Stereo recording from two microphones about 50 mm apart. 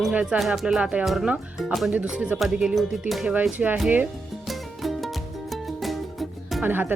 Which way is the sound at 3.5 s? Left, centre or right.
Right.